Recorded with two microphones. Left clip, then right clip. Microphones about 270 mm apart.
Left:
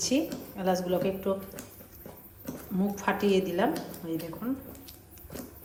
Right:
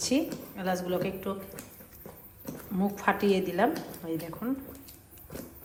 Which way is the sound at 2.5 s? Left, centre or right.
Centre.